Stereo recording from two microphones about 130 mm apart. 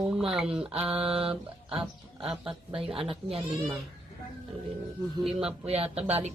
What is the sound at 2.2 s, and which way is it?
Speech, 5° right (ahead or behind).